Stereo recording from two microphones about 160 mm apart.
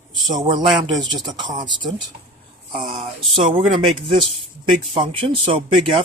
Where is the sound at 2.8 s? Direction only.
40° right (ahead or behind).